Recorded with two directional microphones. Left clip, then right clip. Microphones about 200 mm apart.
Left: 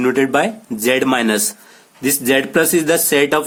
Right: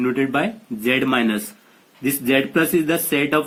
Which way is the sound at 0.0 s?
60° left (ahead or behind).